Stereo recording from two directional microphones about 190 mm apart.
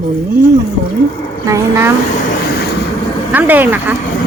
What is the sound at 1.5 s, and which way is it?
Speech, 15° right (ahead or behind).